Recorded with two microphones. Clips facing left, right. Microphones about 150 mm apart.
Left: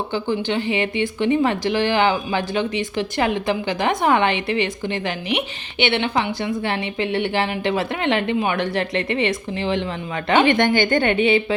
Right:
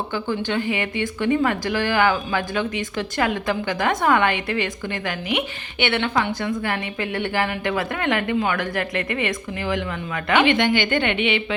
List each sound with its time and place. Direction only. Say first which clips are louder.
0.1 s a woman's voice: left 2 dB; 20° left (ahead or behind)
10.4 s a woman's voice: left 2 dB; 45° left (ahead or behind)